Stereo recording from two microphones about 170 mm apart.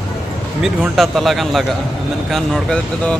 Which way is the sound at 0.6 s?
Centre (ahead or behind).